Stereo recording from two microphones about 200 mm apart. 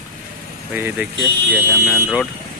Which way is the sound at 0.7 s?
10° right (ahead or behind).